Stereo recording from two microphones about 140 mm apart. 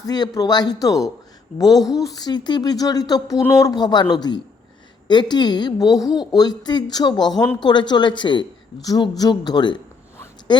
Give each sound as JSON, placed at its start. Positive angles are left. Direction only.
{"t": 0.0, "sound": "a woman's voice", "side_deg": 25}